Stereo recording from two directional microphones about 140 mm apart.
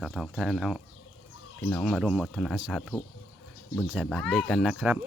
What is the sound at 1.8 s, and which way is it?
Speech, 5° right (ahead or behind).